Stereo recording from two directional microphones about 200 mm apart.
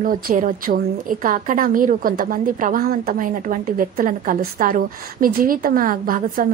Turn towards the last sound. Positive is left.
turn(degrees=-45)  # may be behind; listen again after turning